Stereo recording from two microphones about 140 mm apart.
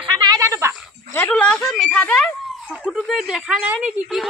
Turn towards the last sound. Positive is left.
turn(degrees=-5)  # may be behind; listen again after turning